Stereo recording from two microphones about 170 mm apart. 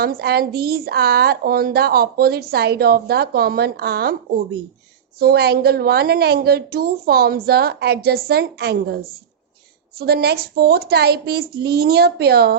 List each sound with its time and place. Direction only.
0.0 s speech: 65° right (ahead or behind)
5.2 s a woman's voice: 70° right (ahead or behind)
10.0 s a woman's voice: 70° right (ahead or behind)